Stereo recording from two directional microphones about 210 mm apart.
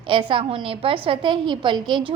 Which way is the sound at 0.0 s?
25° right (ahead or behind).